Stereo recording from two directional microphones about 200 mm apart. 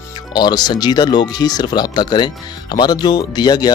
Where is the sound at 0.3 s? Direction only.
20° left (ahead or behind).